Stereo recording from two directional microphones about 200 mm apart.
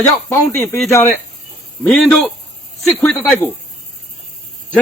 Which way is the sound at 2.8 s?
5° left (ahead or behind).